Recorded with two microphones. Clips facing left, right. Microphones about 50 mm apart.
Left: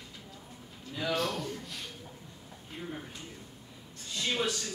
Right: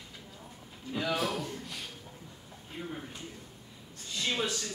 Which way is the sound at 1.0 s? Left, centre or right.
Centre.